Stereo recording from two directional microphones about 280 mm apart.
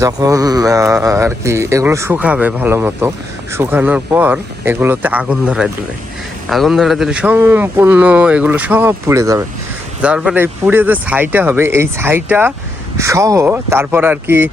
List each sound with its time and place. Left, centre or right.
0.0 s speech: centre